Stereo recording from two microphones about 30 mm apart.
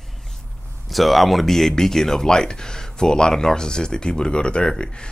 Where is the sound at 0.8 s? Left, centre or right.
Centre.